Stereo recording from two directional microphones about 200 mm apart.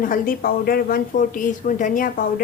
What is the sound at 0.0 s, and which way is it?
A woman's voice, 45° left (ahead or behind).